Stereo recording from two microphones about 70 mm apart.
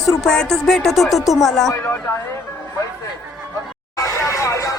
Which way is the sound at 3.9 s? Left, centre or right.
Left.